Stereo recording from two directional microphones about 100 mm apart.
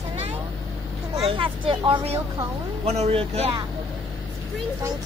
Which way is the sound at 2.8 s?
90° right.